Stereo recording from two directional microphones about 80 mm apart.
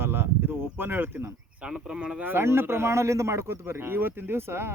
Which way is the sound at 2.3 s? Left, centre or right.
Right.